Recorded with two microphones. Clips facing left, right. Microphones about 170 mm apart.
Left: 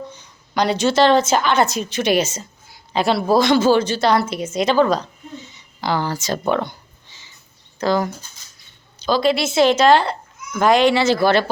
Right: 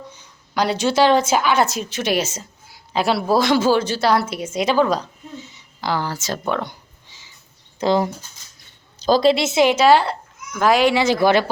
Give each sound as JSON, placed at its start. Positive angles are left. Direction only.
{"t": 0.1, "sound": "a woman's voice", "side_deg": -5}
{"t": 6.7, "sound": "a sound", "side_deg": -10}
{"t": 7.8, "sound": "speech", "side_deg": -25}
{"t": 9.0, "sound": "a woman's voice", "side_deg": -40}
{"t": 9.3, "sound": "speech", "side_deg": -20}